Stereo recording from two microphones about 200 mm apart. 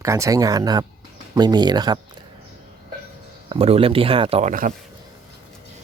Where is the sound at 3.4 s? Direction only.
30° right (ahead or behind).